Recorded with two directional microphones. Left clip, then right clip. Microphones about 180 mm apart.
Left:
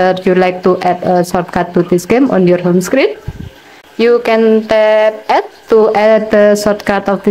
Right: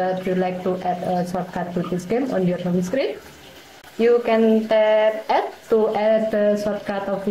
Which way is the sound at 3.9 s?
35° left (ahead or behind).